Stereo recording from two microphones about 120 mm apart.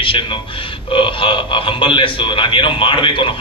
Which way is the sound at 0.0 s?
45° left (ahead or behind).